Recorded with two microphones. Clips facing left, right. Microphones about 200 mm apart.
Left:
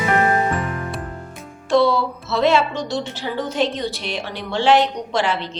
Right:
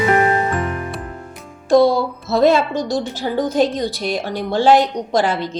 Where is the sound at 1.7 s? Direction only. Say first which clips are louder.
Right 4 dB; 40° right (ahead or behind).